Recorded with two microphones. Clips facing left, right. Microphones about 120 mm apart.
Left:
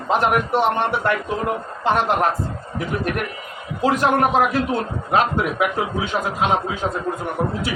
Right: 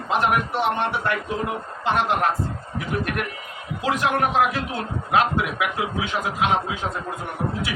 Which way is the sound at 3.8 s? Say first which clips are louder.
Left 5 dB; 40° left (ahead or behind).